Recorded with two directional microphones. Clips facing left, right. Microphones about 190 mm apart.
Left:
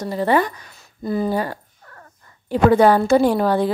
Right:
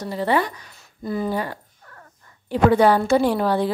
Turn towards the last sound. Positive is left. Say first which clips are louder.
# left 3 dB
turn(degrees=45)  # may be behind; listen again after turning